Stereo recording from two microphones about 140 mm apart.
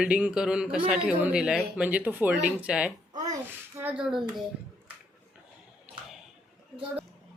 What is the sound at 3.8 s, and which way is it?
Speech, 10° right (ahead or behind).